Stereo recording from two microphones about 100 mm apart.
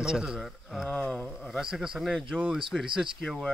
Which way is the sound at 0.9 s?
15° left (ahead or behind).